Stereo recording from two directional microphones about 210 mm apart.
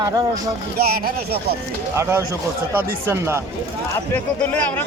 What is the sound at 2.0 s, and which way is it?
A man's voice, 10° right (ahead or behind).